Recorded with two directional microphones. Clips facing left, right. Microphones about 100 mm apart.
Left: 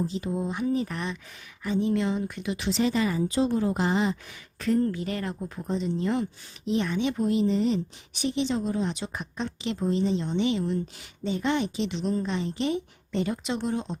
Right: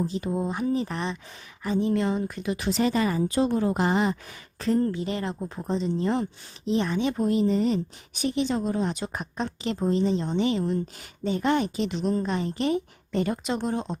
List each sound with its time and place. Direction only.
0.0 s a woman's voice: 50° right (ahead or behind)
4.6 s a woman's voice: 30° right (ahead or behind)